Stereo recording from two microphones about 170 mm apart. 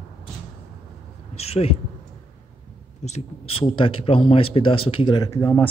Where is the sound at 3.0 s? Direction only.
35° left (ahead or behind).